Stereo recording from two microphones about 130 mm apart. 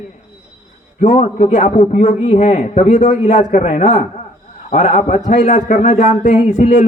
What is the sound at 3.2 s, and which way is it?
Speech, 85° left.